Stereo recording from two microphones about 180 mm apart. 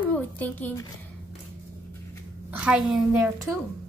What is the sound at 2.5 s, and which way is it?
Speech, 5° right (ahead or behind).